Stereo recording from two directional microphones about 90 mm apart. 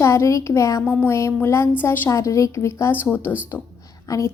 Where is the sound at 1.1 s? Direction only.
30° left (ahead or behind).